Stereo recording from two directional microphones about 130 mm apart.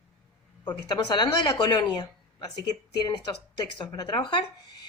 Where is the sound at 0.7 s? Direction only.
30° left (ahead or behind).